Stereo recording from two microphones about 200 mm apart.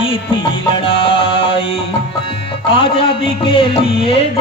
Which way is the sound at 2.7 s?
25° left (ahead or behind).